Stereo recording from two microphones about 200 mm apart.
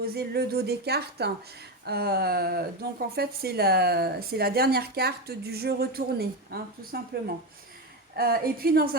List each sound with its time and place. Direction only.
0.0 s a woman's voice: 50° right (ahead or behind)